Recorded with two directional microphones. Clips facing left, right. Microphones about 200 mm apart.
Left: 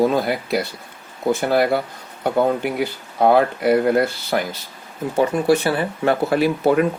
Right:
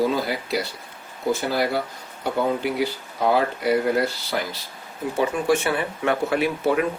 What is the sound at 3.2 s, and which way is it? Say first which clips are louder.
Speech: left 5 dB; 55° left (ahead or behind).